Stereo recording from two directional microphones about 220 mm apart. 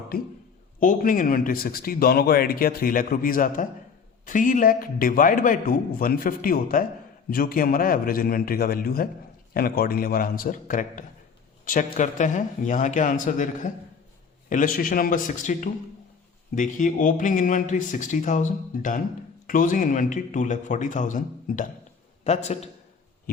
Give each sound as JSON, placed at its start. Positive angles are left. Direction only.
{"t": 0.8, "sound": "speech", "side_deg": 40}